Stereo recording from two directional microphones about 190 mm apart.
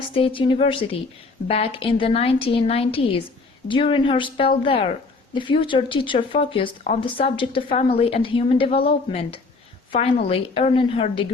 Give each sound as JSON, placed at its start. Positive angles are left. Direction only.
{"t": 0.1, "sound": "a woman's voice", "side_deg": 30}